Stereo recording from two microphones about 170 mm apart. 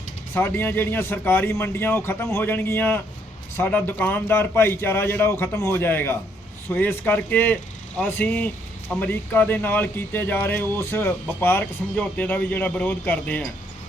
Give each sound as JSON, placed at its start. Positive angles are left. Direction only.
{"t": 0.3, "sound": "speech", "side_deg": 10}